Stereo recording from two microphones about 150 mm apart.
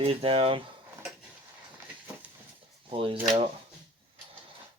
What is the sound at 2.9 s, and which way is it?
Speech, 35° right (ahead or behind).